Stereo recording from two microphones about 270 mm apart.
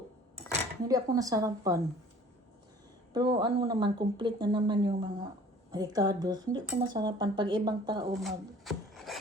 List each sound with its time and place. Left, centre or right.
0.8 s speech: centre
3.1 s speech: centre
8.1 s rub: centre